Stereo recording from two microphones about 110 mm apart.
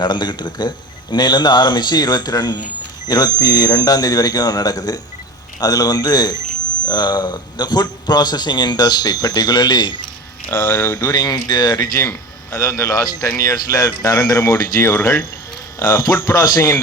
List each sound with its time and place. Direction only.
0.0 s a man's voice: 45° left (ahead or behind)
10.5 s speech: 20° left (ahead or behind)
11.0 s a man's voice: 40° left (ahead or behind)
11.9 s a man's voice: 30° left (ahead or behind)